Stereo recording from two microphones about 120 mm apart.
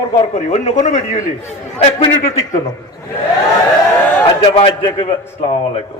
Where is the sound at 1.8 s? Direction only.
60° left (ahead or behind).